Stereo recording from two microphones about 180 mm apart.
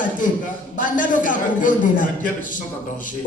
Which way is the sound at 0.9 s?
45° left (ahead or behind).